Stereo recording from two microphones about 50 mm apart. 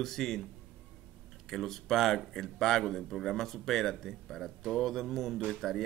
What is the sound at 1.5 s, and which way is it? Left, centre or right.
A man's voice, centre.